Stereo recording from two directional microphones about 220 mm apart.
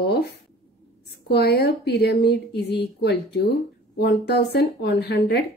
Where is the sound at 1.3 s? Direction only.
45° left (ahead or behind).